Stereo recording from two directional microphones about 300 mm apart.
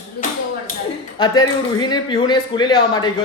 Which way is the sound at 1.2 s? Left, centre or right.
Centre.